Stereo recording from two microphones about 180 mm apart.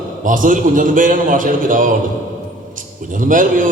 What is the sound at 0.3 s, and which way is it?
A man's voice, 50° right (ahead or behind).